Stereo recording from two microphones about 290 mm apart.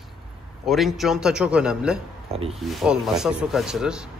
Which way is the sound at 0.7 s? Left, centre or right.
Centre.